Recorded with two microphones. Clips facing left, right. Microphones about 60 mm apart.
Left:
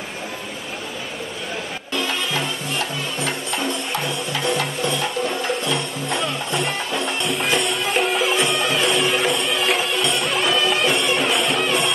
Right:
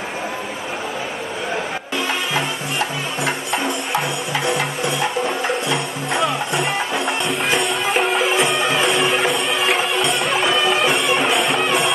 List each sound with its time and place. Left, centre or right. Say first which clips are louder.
2.0 s music: right 2 dB; centre
7.2 s music: right 2 dB; centre